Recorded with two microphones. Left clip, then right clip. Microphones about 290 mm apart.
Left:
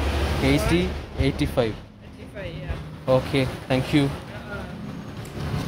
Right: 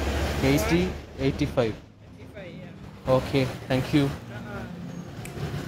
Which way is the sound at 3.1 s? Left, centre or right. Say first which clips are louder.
Left 2 dB; centre.